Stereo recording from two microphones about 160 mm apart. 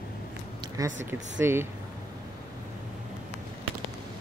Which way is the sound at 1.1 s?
15° right (ahead or behind).